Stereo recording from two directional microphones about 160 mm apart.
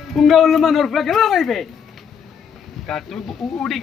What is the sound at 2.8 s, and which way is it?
Speech, centre (ahead or behind).